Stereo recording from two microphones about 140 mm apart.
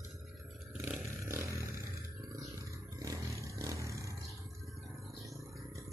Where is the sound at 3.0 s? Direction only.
25° right (ahead or behind).